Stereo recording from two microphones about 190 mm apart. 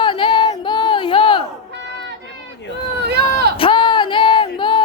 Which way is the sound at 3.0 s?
60° right (ahead or behind).